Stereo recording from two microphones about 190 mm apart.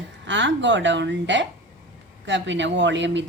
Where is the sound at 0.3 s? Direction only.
70° right (ahead or behind).